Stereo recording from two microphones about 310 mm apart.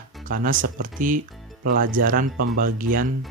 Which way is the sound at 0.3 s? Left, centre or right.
Right.